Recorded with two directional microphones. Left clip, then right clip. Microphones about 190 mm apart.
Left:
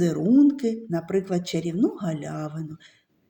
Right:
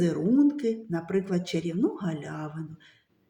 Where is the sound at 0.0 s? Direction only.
25° left (ahead or behind).